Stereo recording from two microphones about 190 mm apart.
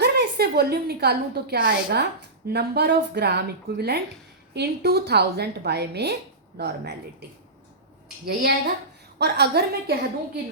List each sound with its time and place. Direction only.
0.0 s a woman's voice: 55° right (ahead or behind)